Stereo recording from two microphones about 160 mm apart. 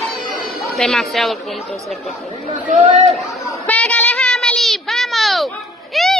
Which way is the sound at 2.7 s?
50° right (ahead or behind).